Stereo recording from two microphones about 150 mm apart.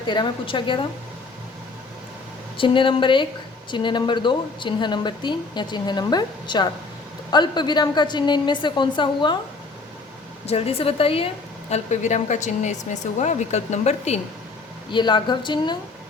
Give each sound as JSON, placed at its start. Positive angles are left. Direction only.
{"t": 0.0, "sound": "a woman's voice", "side_deg": 30}
{"t": 2.6, "sound": "a woman's voice", "side_deg": 35}
{"t": 10.4, "sound": "a woman's voice", "side_deg": 45}
{"t": 11.7, "sound": "a woman's voice", "side_deg": 50}
{"t": 14.8, "sound": "a woman's voice", "side_deg": 30}